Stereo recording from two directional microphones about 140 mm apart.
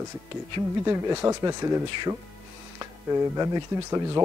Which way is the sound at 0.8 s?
20° right (ahead or behind).